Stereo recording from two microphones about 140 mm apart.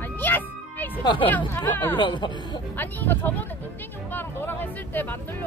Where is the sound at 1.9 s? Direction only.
35° left (ahead or behind).